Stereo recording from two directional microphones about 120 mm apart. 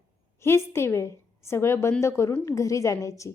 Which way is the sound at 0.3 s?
20° left (ahead or behind).